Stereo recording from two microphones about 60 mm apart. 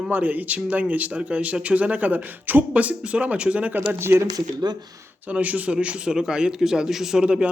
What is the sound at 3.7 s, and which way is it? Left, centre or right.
Speech, right.